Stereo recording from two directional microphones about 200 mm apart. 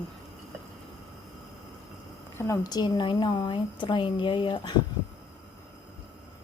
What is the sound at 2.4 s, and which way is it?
A woman's voice, 15° left (ahead or behind).